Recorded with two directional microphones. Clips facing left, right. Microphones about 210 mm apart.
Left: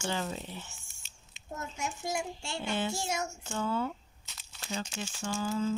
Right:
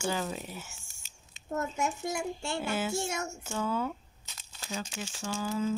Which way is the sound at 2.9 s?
60° right (ahead or behind).